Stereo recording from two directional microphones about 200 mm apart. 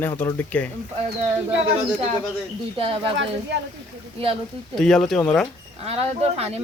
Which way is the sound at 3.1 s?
65° right (ahead or behind).